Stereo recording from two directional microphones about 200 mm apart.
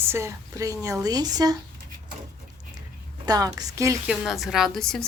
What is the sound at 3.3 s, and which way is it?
Speech, 20° right (ahead or behind).